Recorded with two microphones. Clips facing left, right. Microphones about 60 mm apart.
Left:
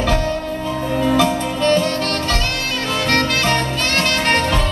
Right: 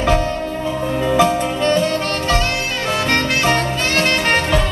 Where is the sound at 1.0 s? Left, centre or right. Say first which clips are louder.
Right 2 dB; centre.